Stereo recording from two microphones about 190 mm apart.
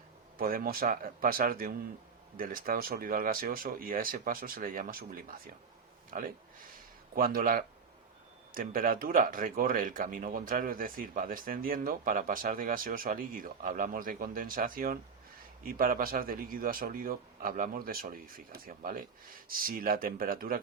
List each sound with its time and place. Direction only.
0.3 s speech: 50° right (ahead or behind)